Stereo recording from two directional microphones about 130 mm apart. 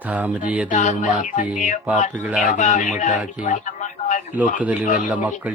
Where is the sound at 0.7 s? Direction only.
70° left (ahead or behind).